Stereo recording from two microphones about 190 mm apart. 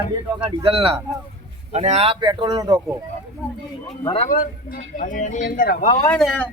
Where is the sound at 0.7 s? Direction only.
30° right (ahead or behind).